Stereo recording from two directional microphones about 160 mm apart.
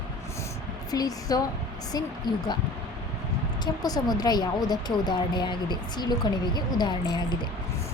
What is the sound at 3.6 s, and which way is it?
Speech, 25° left (ahead or behind).